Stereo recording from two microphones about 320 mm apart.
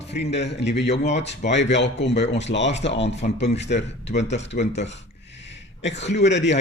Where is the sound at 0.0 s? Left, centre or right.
Left.